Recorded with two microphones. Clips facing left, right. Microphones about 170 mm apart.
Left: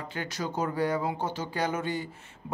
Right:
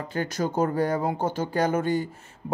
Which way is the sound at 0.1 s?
45° right (ahead or behind).